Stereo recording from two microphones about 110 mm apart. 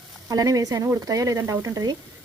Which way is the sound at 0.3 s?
35° right (ahead or behind).